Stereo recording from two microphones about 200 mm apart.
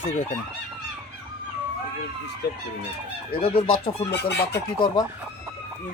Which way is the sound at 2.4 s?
55° left (ahead or behind).